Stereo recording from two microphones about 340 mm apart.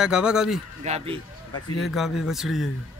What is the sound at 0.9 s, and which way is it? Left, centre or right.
Speech, centre.